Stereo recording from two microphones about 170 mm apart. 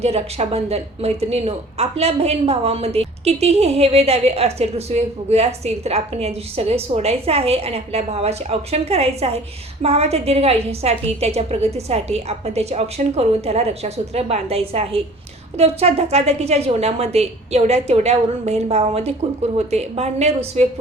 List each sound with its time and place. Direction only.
0.0 s speech: 40° right (ahead or behind)